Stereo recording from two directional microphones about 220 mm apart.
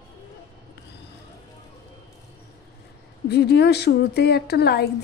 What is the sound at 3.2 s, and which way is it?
Speech, 50° left (ahead or behind).